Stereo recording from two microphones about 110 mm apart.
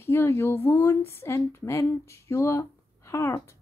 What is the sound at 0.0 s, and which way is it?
A woman's voice, 20° left (ahead or behind).